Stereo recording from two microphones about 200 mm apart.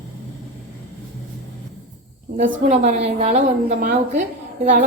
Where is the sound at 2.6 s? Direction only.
35° right (ahead or behind).